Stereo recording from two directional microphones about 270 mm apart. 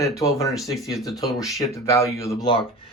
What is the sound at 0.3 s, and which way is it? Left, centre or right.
Speech, centre.